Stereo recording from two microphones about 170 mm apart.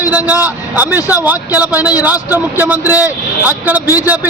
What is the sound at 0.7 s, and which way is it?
Speech, 10° right (ahead or behind).